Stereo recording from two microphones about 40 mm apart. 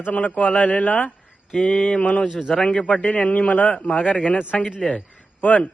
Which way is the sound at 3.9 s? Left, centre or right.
Left.